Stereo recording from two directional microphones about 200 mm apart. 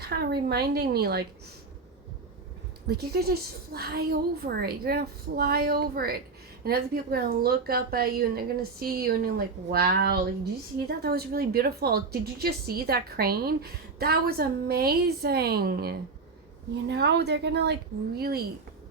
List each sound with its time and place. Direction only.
0.0 s a woman's voice: 55° right (ahead or behind)
2.8 s a woman's voice: 55° right (ahead or behind)